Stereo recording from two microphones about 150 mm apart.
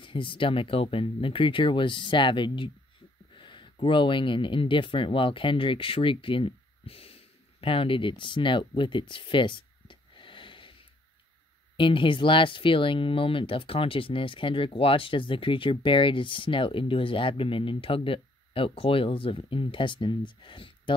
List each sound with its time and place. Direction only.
0.0 s speech: 35° left (ahead or behind)
11.7 s speech: 35° left (ahead or behind)